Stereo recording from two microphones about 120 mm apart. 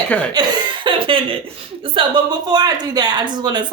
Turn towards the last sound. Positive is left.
turn(degrees=-35)  # may be behind; listen again after turning